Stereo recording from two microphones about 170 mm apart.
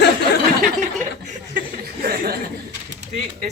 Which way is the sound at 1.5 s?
60° right (ahead or behind).